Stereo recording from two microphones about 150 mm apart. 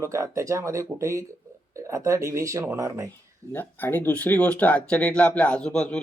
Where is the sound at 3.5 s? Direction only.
10° left (ahead or behind).